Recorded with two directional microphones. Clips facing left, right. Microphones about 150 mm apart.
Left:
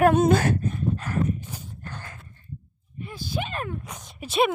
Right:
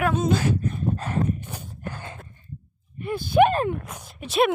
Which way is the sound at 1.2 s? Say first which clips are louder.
Even; 60° right (ahead or behind).